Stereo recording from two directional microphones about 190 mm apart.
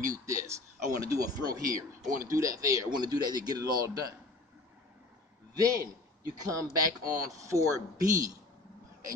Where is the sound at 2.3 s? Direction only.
15° right (ahead or behind).